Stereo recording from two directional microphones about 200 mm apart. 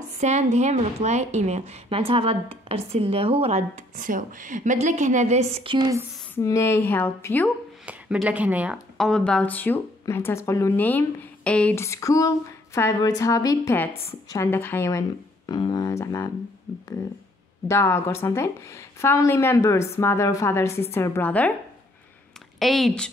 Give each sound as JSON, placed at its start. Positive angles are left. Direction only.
{"t": 0.2, "sound": "a woman's voice", "side_deg": -35}
{"t": 6.3, "sound": "speech", "side_deg": 15}
{"t": 7.8, "sound": "speech", "side_deg": -5}
{"t": 17.6, "sound": "speech", "side_deg": 15}
{"t": 22.6, "sound": "a woman's voice", "side_deg": 0}